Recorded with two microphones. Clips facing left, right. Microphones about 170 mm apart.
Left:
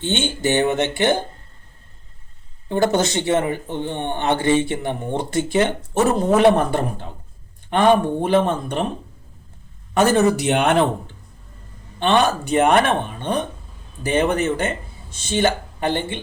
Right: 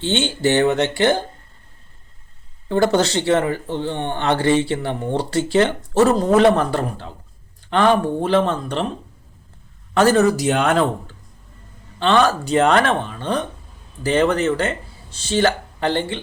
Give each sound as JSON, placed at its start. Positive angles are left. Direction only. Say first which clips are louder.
{"t": 0.0, "sound": "speech", "louder": "right 2 dB", "side_deg": 20}
{"t": 3.0, "sound": "speech", "louder": "right 2 dB", "side_deg": 20}
{"t": 10.4, "sound": "speech", "louder": "even", "side_deg": 25}